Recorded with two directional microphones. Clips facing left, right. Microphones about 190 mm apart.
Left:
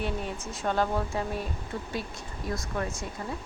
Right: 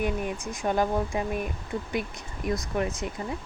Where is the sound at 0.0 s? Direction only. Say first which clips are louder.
Right 4 dB; 15° right (ahead or behind).